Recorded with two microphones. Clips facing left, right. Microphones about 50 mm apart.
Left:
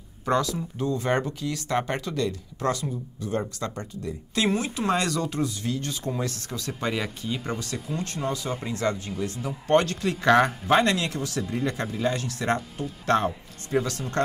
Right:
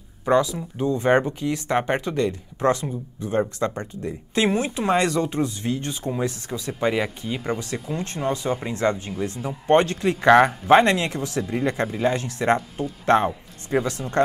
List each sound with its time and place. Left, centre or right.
0.2 s speech: centre